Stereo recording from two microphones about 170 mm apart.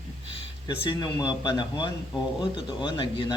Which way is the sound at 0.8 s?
25° left (ahead or behind).